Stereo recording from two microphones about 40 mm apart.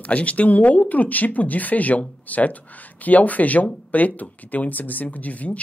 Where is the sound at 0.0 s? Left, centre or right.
Left.